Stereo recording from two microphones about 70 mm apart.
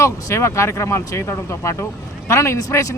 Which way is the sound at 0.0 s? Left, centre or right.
Left.